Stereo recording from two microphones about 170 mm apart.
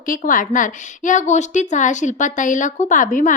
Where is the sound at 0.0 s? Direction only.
55° left (ahead or behind).